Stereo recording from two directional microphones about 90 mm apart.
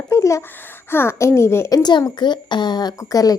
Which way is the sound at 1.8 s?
55° left (ahead or behind).